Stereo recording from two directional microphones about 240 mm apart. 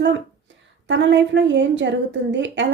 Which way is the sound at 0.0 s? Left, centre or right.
Right.